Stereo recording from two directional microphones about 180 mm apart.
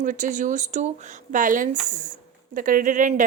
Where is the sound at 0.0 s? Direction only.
45° right (ahead or behind).